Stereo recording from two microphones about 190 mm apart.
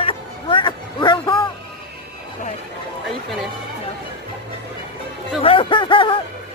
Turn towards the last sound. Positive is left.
turn(degrees=25)  # may be behind; listen again after turning